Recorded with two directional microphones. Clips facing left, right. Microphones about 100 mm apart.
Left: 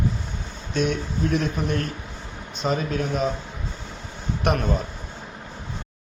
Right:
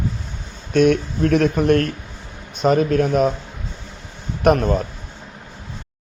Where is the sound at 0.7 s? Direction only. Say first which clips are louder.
Right 9 dB; 60° right (ahead or behind).